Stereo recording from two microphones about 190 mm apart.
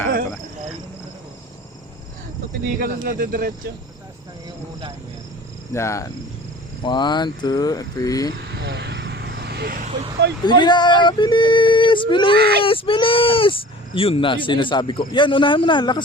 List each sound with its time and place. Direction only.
2.7 s speech: 45° right (ahead or behind)
5.7 s speech: 15° left (ahead or behind)
6.8 s female singing: 25° left (ahead or behind)
8.5 s vehicle: 60° right (ahead or behind)
10.4 s female singing: 25° left (ahead or behind)